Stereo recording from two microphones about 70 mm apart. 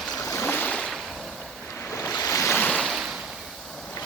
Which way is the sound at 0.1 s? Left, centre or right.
Left.